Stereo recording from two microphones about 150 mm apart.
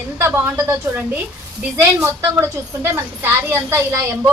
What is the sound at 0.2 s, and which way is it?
A woman's voice, 15° right (ahead or behind).